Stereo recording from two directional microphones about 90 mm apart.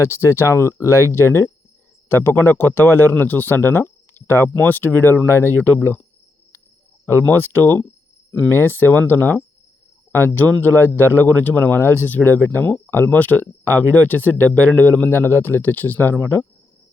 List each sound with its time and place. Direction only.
0.0 s a man's voice: 30° left (ahead or behind)
7.0 s a man's voice: 20° left (ahead or behind)